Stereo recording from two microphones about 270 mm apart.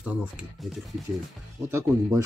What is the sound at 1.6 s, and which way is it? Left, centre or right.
Speech, centre.